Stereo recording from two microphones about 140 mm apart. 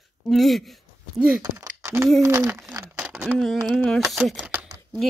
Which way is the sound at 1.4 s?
20° right (ahead or behind).